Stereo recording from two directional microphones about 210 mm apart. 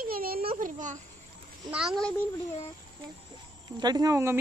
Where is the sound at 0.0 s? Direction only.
45° right (ahead or behind).